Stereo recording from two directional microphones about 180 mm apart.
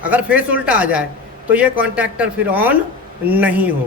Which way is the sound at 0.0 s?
5° right (ahead or behind).